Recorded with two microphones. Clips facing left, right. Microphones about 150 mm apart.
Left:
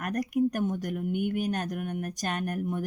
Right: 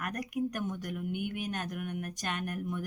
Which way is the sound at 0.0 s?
40° left (ahead or behind).